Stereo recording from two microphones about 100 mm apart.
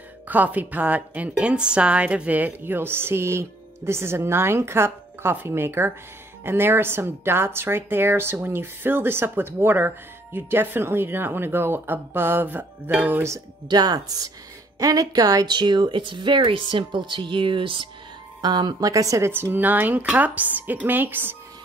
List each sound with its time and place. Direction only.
0.3 s speech: 15° right (ahead or behind)
13.7 s speech: 40° right (ahead or behind)
18.4 s speech: 45° right (ahead or behind); by 21.4 s 20° right (ahead or behind)